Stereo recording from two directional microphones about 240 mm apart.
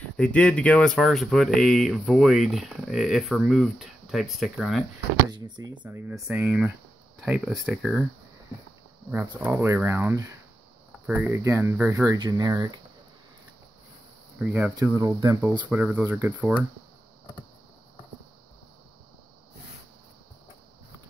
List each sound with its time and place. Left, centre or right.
0.2 s speech: centre
5.3 s speech: centre
9.1 s speech: centre
14.4 s speech: centre
15.7 s speech: centre